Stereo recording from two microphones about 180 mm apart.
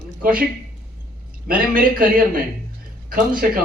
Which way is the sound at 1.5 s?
50° right (ahead or behind).